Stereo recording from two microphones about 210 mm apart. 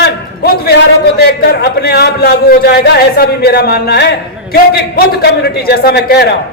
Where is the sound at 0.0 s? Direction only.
45° left (ahead or behind).